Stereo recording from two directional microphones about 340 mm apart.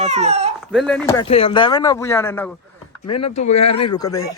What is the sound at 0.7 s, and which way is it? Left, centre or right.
Speech, centre.